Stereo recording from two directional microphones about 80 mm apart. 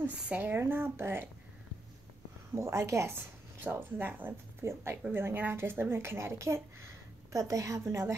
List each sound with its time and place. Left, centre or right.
0.0 s a woman's voice: right
2.5 s a woman's voice: right